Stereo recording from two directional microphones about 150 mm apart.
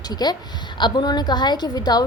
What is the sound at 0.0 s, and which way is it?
A woman's voice, 25° left (ahead or behind).